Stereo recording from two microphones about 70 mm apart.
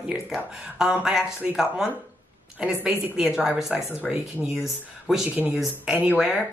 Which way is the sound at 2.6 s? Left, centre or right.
Centre.